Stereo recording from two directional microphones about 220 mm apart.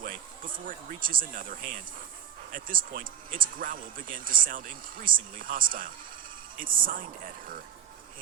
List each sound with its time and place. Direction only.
0.7 s speech: 40° right (ahead or behind)